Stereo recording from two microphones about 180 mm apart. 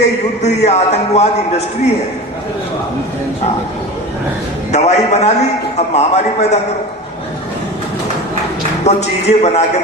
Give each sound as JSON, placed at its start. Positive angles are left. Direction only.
{"t": 0.4, "sound": "a man's voice", "side_deg": 40}
{"t": 4.7, "sound": "a man's voice", "side_deg": 40}
{"t": 8.8, "sound": "a man's voice", "side_deg": 35}